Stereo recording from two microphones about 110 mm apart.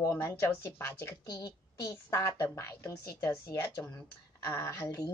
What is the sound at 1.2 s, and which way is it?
Speech, 40° left (ahead or behind).